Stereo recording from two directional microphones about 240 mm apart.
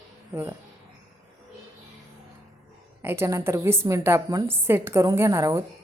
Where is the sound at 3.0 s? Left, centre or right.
Centre.